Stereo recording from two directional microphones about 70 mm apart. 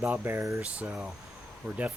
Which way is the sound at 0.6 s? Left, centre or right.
Centre.